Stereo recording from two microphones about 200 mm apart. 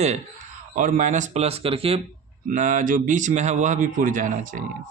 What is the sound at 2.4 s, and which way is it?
A man's voice, 40° right (ahead or behind).